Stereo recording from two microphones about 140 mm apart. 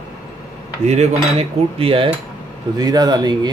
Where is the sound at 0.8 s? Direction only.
55° right (ahead or behind).